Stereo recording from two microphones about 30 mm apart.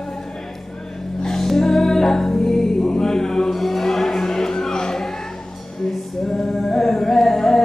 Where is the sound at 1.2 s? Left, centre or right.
Centre.